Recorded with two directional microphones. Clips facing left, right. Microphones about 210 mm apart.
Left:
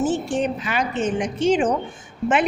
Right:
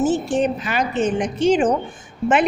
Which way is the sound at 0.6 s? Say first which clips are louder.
Right 3 dB; 40° right (ahead or behind).